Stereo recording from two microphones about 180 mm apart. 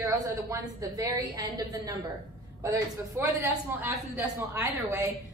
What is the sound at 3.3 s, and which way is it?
A woman's voice, 15° right (ahead or behind).